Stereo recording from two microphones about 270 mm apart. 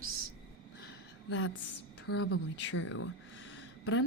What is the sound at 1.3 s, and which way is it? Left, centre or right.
Speech, left.